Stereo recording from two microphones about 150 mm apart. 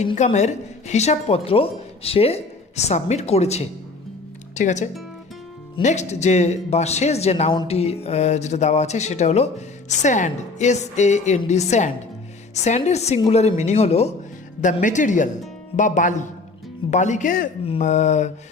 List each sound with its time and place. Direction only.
0.3 s speech: 50° left (ahead or behind)
14.6 s speech: 60° left (ahead or behind)
17.7 s speech: 50° left (ahead or behind)